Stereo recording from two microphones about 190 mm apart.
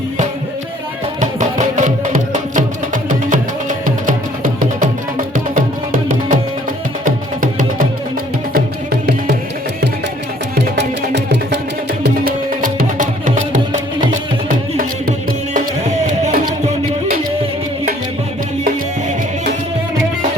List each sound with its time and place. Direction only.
1.2 s music: 40° right (ahead or behind)
10.5 s music: 65° right (ahead or behind)
12.0 s music: 50° right (ahead or behind)
14.8 s music: 45° right (ahead or behind)